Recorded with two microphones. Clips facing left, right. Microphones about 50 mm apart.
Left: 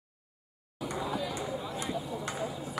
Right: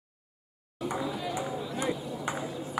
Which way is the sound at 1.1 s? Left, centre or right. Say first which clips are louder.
Right 1 dB; centre.